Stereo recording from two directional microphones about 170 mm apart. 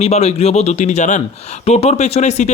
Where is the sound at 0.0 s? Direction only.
40° left (ahead or behind).